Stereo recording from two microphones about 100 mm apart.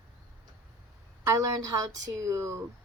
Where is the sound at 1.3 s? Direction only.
35° right (ahead or behind).